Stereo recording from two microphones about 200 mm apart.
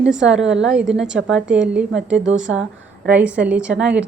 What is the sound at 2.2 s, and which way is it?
Speech, 70° right (ahead or behind).